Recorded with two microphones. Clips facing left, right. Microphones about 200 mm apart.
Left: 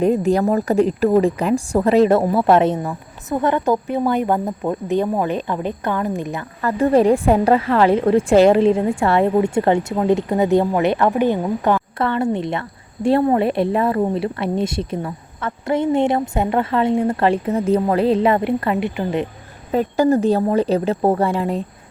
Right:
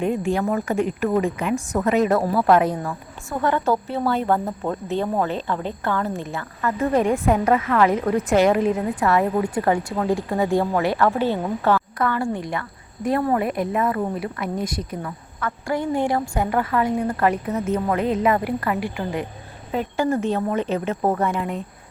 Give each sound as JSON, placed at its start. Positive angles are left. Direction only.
{"t": 0.0, "sound": "a woman's voice", "side_deg": 40}
{"t": 6.6, "sound": "a woman's voice", "side_deg": 35}
{"t": 19.7, "sound": "a woman's voice", "side_deg": 40}